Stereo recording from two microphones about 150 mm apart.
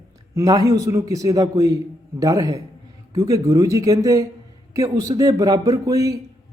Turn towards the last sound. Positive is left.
turn(degrees=-25)  # may be behind; listen again after turning